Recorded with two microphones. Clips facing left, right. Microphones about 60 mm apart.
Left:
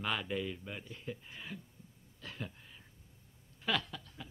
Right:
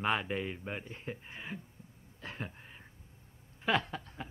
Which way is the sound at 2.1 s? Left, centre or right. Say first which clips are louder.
Right 3 dB; right.